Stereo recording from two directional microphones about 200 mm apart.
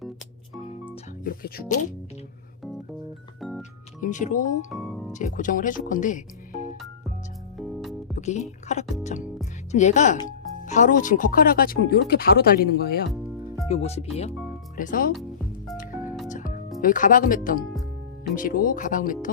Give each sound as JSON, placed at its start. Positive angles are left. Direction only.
{"t": 1.2, "sound": "speech", "side_deg": 45}
{"t": 3.6, "sound": "music", "side_deg": 40}
{"t": 4.7, "sound": "music", "side_deg": 0}
{"t": 5.1, "sound": "speech", "side_deg": 40}
{"t": 7.6, "sound": "music", "side_deg": 0}
{"t": 8.1, "sound": "speech", "side_deg": 35}
{"t": 13.7, "sound": "speech", "side_deg": 30}
{"t": 14.8, "sound": "speech", "side_deg": 45}
{"t": 16.3, "sound": "music", "side_deg": 40}
{"t": 16.8, "sound": "speech", "side_deg": 40}